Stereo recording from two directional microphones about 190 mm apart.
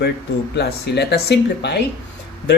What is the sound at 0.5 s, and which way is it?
Speech, 60° left (ahead or behind).